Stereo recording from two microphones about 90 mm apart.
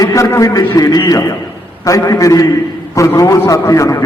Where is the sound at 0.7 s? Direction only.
40° left (ahead or behind).